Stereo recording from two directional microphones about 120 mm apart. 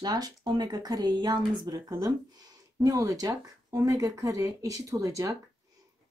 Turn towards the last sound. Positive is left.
turn(degrees=-30)  # may be behind; listen again after turning